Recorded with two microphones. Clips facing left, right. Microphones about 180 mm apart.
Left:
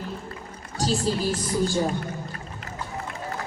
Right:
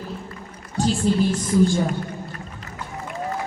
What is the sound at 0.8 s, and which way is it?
Speech, 40° left (ahead or behind).